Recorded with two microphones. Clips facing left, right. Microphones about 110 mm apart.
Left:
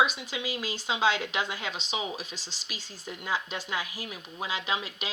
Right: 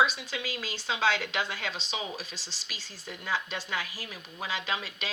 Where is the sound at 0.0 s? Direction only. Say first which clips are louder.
Even; 15° left (ahead or behind).